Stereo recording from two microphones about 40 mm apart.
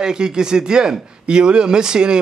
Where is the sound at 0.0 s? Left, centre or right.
Centre.